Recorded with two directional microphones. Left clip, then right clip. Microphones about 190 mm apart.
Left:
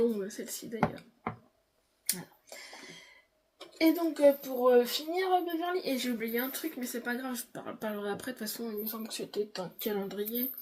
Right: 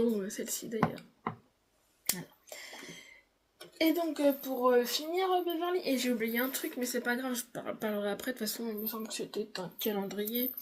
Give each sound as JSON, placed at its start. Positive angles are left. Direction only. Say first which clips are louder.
{"t": 0.2, "sound": "speech", "louder": "right 1 dB", "side_deg": -45}
{"t": 2.0, "sound": "finger snapping", "louder": "right 1 dB", "side_deg": -40}
{"t": 3.8, "sound": "speech", "louder": "left 3 dB", "side_deg": -40}